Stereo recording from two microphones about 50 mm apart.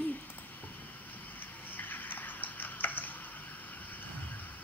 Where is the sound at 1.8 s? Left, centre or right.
Left.